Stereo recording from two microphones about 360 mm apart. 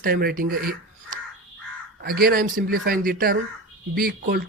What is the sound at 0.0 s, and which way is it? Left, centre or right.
Speech, right.